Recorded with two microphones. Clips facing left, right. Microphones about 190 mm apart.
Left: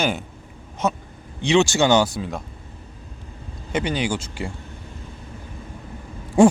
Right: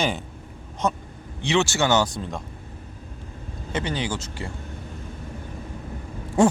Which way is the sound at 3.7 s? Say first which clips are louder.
Left 4 dB; 15° left (ahead or behind).